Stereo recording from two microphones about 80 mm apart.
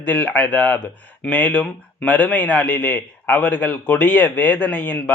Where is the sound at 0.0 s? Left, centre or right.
Centre.